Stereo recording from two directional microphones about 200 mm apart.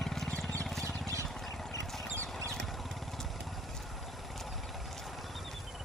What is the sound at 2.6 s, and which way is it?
Vehicle, centre (ahead or behind).